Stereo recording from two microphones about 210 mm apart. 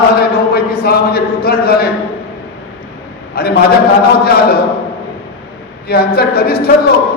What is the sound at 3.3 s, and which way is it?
A man's voice, 45° left (ahead or behind).